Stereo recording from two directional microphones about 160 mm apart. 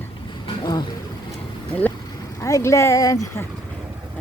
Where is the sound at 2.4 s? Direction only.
20° left (ahead or behind).